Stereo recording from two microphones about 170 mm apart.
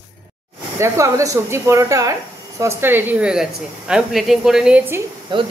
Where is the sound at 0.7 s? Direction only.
15° right (ahead or behind).